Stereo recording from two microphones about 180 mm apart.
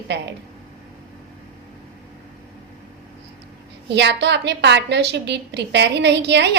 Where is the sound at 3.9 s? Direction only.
70° right (ahead or behind).